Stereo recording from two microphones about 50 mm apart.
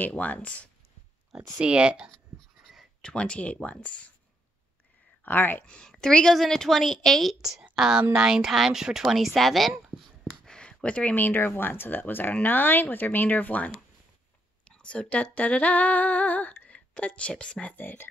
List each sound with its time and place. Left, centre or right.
0.1 s female singing: left
1.3 s speech: right
3.0 s female singing: centre
5.2 s speech: left
5.7 s a woman's voice: centre
7.7 s a woman's voice: centre
10.4 s a sound: centre
11.1 s speech: left
14.7 s female singing: centre
16.6 s speech: left
17.7 s speech: left